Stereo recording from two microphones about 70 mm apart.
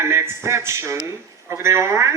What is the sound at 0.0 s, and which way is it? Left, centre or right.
A man's voice, right.